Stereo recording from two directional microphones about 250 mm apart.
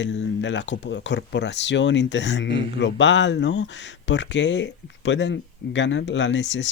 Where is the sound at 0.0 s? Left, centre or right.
Left.